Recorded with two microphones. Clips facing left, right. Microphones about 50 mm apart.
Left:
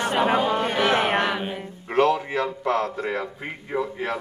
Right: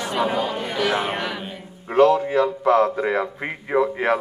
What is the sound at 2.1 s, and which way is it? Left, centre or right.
Speech, centre.